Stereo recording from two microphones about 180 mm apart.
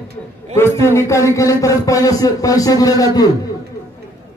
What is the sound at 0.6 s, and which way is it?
Speech, 15° left (ahead or behind).